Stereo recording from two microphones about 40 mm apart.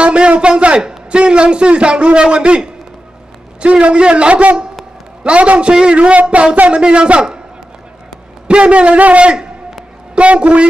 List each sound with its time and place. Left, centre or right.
0.0 s a man's voice: right
8.5 s a man's voice: right
10.1 s a sound: right